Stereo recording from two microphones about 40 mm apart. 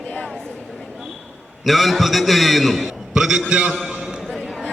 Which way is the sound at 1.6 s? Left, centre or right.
Centre.